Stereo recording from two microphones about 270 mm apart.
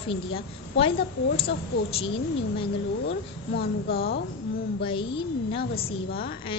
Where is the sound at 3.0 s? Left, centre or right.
Left.